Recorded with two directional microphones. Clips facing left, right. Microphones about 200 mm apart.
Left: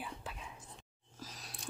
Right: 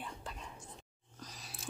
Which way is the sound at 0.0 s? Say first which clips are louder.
Even; 5° left (ahead or behind).